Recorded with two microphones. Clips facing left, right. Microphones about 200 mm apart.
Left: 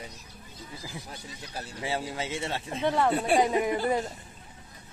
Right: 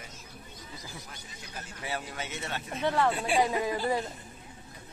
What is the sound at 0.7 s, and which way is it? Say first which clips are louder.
Speech: left 5 dB; 35° left (ahead or behind).